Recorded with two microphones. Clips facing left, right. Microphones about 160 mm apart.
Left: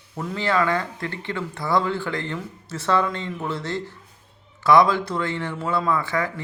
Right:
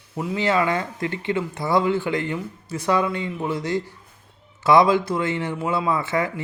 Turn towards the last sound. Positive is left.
turn(degrees=-20)  # may be behind; listen again after turning